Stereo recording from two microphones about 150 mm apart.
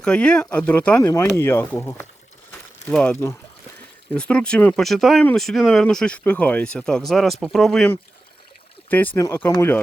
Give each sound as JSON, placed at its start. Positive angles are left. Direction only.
{"t": 0.0, "sound": "speech", "side_deg": 5}
{"t": 2.5, "sound": "a sound", "side_deg": 5}
{"t": 4.1, "sound": "speech", "side_deg": 5}
{"t": 8.9, "sound": "speech", "side_deg": 10}